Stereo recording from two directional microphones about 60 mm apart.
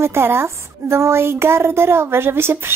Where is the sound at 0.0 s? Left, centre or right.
Right.